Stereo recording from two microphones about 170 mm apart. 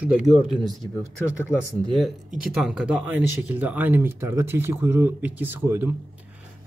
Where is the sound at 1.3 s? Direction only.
15° left (ahead or behind).